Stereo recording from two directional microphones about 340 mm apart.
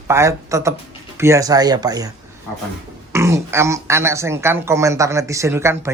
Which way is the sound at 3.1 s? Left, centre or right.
Centre.